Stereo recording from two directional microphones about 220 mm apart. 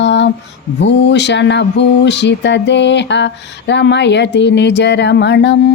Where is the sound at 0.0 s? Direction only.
55° left (ahead or behind).